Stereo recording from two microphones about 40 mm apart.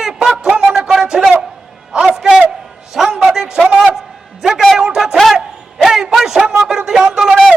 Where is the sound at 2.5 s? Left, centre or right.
Centre.